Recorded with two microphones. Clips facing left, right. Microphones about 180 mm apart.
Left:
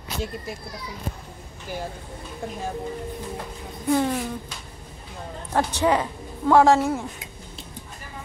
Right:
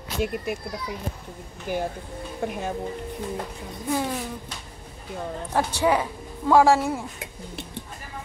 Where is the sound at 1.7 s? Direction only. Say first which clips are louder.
Right 5 dB; 50° right (ahead or behind).